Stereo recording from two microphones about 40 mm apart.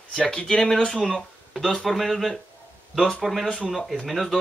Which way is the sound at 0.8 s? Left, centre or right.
Centre.